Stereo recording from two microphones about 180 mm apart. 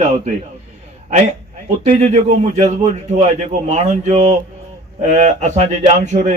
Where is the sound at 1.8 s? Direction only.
40° right (ahead or behind).